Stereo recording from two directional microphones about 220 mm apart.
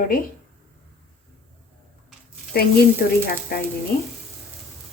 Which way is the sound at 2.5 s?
45° left (ahead or behind).